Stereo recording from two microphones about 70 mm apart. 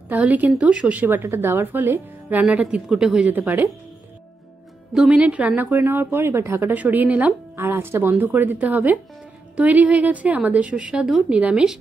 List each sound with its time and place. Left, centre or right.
0.2 s speech: right
2.6 s speech: centre
3.3 s speech: right
4.9 s speech: centre
5.8 s speech: right
7.5 s speech: right; by 11.8 s centre